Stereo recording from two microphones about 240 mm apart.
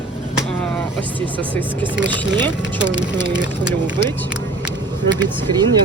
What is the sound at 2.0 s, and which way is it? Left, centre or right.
Speech, centre.